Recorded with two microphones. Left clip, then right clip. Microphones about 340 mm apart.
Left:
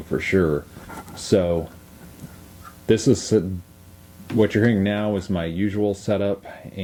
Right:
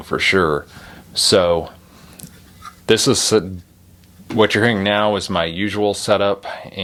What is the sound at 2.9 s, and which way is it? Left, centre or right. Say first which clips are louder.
Speech: right 4 dB; right.